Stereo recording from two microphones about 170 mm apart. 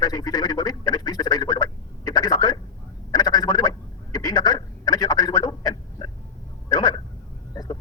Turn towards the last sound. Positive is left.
turn(degrees=20)  # may be behind; listen again after turning